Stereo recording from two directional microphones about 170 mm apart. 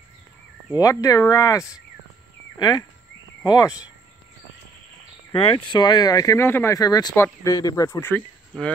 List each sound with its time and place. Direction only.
0.7 s speech: 20° left (ahead or behind)
3.4 s speech: 20° left (ahead or behind)
5.3 s speech: 30° left (ahead or behind); by 8.7 s 10° left (ahead or behind)